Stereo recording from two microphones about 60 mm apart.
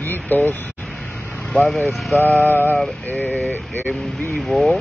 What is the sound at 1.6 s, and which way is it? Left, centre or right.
Speech, left.